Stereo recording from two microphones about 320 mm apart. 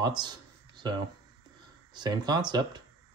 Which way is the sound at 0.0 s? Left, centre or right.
Centre.